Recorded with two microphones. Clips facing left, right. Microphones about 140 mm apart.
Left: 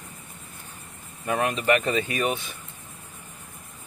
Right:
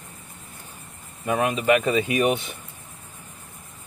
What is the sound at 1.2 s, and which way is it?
Speech, 10° right (ahead or behind).